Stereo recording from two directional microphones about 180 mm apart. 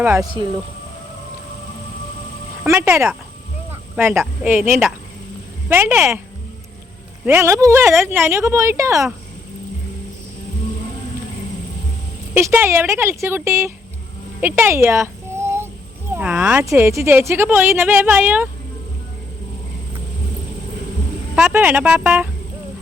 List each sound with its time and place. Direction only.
0.0 s speech: 15° right (ahead or behind)
2.6 s speech: 15° right (ahead or behind)
3.7 s a sound: 10° right (ahead or behind)
4.4 s speech: 10° right (ahead or behind)
7.3 s speech: 15° right (ahead or behind)
12.3 s speech: 10° right (ahead or behind)
14.4 s a sound: 15° right (ahead or behind)
16.1 s speech: 5° right (ahead or behind)
21.3 s speech: 5° right (ahead or behind)